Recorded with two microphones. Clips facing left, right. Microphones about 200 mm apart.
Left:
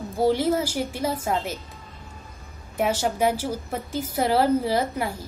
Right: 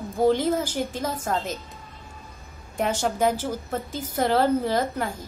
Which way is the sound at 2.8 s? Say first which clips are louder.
Left 1 dB; 5° left (ahead or behind).